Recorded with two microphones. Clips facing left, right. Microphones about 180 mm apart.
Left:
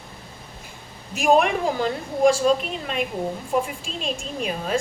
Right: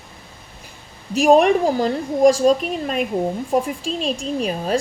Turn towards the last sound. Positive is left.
turn(degrees=-35)  # may be behind; listen again after turning